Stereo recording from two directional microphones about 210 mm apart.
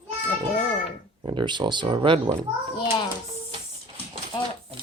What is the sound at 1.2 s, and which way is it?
Speech, 20° right (ahead or behind).